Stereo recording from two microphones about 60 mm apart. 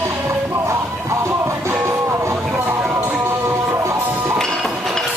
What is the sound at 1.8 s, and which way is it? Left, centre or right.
Music, right.